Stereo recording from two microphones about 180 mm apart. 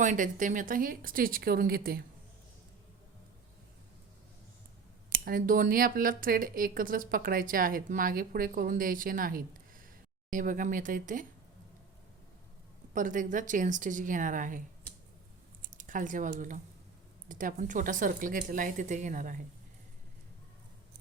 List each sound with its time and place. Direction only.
0.0 s speech: 45° right (ahead or behind)
5.1 s speech: 50° right (ahead or behind)
12.9 s speech: 45° right (ahead or behind)
15.7 s speech: 45° right (ahead or behind)